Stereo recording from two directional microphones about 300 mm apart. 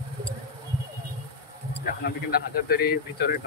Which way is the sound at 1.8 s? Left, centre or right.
Left.